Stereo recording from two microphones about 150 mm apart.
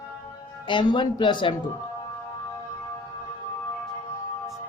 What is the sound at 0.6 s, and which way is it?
Speech, 30° left (ahead or behind).